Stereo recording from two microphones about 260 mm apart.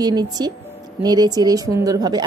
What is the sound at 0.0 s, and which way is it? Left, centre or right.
A woman's voice, centre.